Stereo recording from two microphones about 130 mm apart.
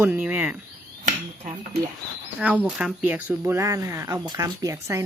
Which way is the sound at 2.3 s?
10° right (ahead or behind).